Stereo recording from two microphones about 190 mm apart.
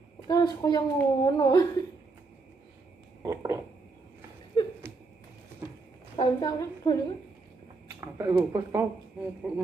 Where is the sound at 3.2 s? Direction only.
20° right (ahead or behind).